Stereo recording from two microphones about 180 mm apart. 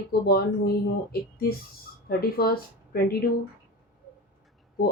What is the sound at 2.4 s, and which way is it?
Speech, 60° left (ahead or behind).